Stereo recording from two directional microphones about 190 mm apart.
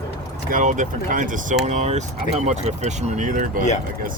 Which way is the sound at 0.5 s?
40° right (ahead or behind).